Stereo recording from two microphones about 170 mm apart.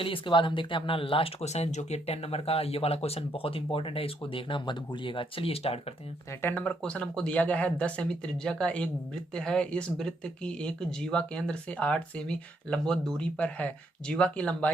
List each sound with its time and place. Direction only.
0.0 s speech: 30° left (ahead or behind)
6.4 s speech: 10° left (ahead or behind)